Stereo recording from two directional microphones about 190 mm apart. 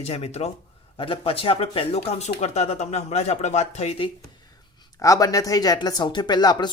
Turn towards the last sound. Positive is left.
turn(degrees=20)  # may be behind; listen again after turning